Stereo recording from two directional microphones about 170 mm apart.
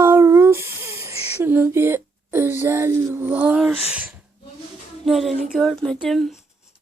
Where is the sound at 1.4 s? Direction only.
10° right (ahead or behind).